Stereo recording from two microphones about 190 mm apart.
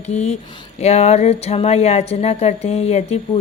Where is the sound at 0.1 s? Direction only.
35° left (ahead or behind).